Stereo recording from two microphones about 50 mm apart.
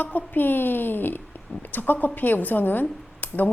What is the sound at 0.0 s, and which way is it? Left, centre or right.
A woman's voice, left.